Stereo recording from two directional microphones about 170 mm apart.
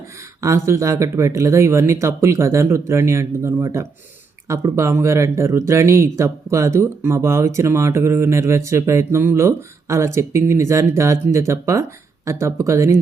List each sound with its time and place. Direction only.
0.4 s speech: 15° right (ahead or behind)